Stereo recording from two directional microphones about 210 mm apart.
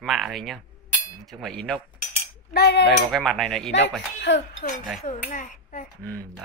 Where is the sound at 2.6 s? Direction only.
50° left (ahead or behind).